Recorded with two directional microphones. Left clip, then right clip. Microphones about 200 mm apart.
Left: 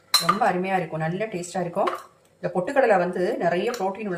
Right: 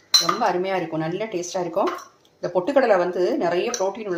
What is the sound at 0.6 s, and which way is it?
Speech, 25° right (ahead or behind).